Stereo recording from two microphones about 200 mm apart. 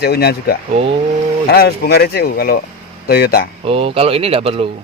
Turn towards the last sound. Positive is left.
turn(degrees=-30)  # may be behind; listen again after turning